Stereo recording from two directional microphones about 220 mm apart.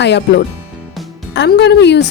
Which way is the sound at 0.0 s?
50° left (ahead or behind).